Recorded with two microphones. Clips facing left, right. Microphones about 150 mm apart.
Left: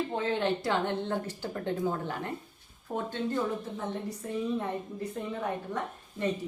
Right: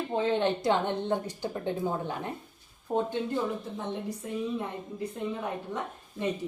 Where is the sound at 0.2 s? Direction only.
20° right (ahead or behind).